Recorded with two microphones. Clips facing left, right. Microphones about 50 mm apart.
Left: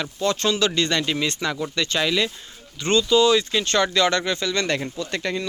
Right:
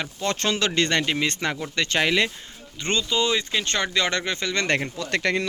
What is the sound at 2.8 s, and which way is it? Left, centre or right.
Speech, right.